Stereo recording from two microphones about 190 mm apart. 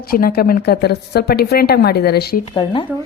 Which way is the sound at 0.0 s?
50° left (ahead or behind).